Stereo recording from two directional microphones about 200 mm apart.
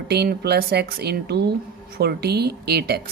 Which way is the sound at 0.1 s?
55° right (ahead or behind).